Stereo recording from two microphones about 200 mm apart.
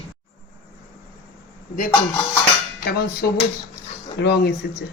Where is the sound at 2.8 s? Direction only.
50° left (ahead or behind).